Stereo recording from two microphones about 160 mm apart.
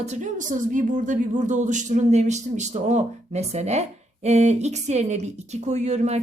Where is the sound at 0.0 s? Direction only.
50° right (ahead or behind).